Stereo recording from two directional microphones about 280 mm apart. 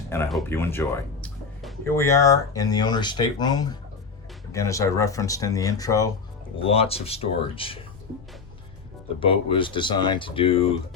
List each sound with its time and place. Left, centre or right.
0.1 s speech: centre
9.2 s speech: centre